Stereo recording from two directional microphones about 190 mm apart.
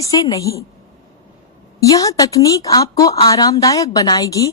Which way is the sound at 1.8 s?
15° left (ahead or behind).